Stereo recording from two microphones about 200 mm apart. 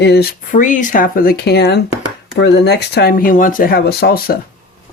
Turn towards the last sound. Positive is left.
turn(degrees=50)  # may be behind; listen again after turning